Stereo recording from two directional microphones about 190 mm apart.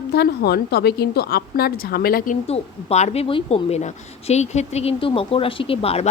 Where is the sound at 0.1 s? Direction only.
55° left (ahead or behind).